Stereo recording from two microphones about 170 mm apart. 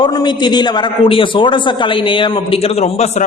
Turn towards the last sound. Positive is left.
turn(degrees=40)  # may be behind; listen again after turning